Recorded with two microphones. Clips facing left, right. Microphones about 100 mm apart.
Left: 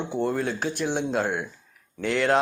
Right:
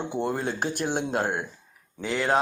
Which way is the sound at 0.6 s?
50° right (ahead or behind).